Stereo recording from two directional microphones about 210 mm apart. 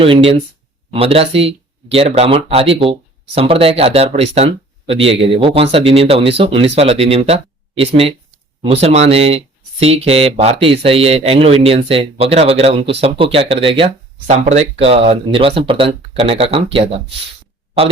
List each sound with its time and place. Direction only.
0.9 s speech: 30° right (ahead or behind)